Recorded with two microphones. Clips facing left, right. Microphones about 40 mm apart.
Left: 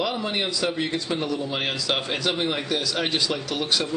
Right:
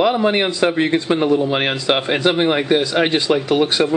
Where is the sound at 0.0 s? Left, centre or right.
Right.